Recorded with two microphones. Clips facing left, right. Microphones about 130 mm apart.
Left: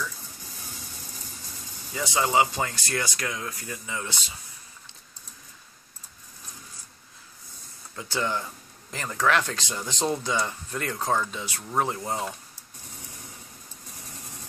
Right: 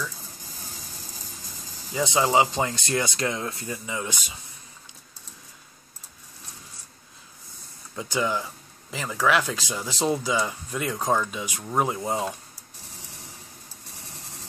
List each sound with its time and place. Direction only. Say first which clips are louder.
2.0 s speech: right 2 dB; 20° right (ahead or behind)
7.9 s speech: right 3 dB; 15° right (ahead or behind)